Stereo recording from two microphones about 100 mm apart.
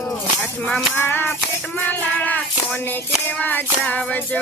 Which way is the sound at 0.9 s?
20° left (ahead or behind).